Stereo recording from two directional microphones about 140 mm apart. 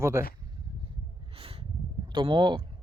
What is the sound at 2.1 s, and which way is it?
Speech, 30° right (ahead or behind).